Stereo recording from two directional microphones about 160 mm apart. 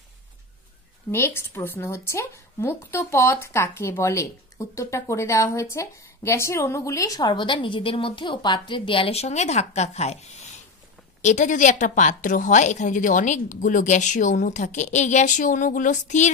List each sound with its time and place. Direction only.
1.1 s a woman's voice: 15° left (ahead or behind); by 16.3 s 50° left (ahead or behind)